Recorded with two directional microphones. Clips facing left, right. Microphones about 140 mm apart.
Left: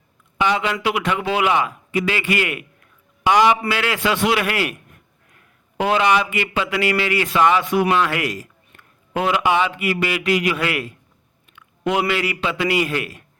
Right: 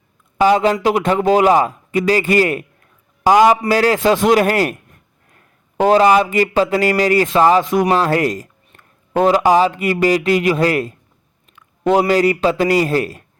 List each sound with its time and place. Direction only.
0.3 s a man's voice: 40° right (ahead or behind)